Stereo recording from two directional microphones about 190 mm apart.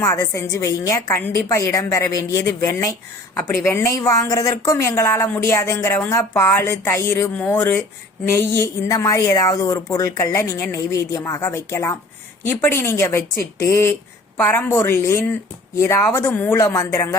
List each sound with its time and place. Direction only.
0.0 s speech: 15° left (ahead or behind)